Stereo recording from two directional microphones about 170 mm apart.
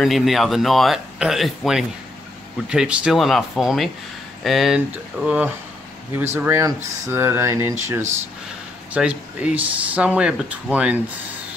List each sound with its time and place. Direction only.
0.0 s speech: centre (ahead or behind); by 7.7 s 15° right (ahead or behind)
8.9 s speech: 5° right (ahead or behind)